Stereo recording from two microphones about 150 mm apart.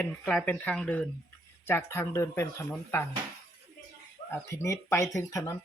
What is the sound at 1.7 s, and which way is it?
Speech, 15° left (ahead or behind).